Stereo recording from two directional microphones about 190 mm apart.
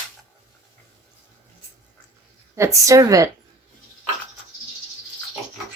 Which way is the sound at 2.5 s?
15° right (ahead or behind).